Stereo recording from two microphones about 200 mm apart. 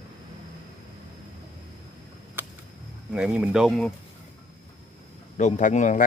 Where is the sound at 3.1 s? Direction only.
5° right (ahead or behind).